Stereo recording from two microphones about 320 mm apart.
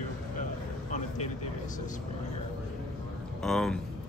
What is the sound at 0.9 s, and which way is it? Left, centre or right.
Speech, left.